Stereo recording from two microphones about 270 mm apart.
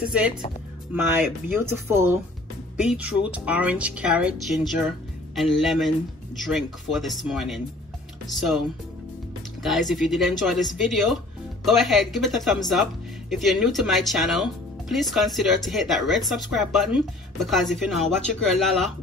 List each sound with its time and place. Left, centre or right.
0.0 s a woman's voice: centre